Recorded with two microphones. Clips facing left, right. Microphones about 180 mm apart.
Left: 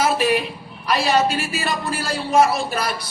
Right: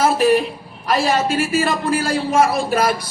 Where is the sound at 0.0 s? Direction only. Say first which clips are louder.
Right 4 dB; 45° right (ahead or behind).